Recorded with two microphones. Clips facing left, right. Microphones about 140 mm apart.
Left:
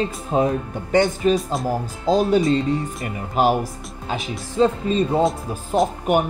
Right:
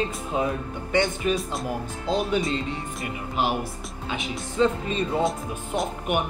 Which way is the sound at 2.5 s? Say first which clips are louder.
Left 8 dB; 45° left (ahead or behind).